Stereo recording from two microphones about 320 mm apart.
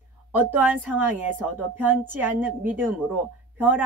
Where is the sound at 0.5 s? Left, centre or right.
Centre.